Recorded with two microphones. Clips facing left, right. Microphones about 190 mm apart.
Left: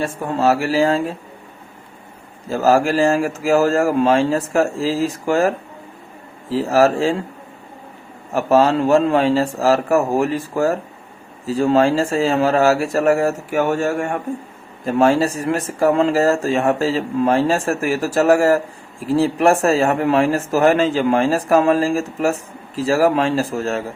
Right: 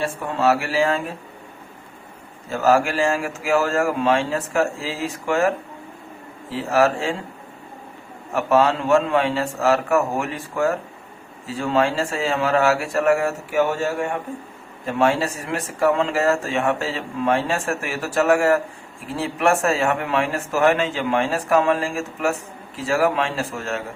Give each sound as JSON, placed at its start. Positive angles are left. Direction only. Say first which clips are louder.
{"t": 0.0, "sound": "speech", "louder": "left 3 dB", "side_deg": 40}
{"t": 2.5, "sound": "speech", "louder": "left 3 dB", "side_deg": 35}
{"t": 8.4, "sound": "speech", "louder": "left 4 dB", "side_deg": 35}
{"t": 14.8, "sound": "speech", "louder": "left 5 dB", "side_deg": 40}